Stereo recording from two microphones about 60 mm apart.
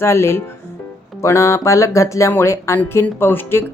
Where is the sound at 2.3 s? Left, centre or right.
Left.